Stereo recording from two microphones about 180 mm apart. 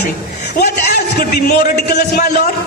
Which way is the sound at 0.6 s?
60° left (ahead or behind).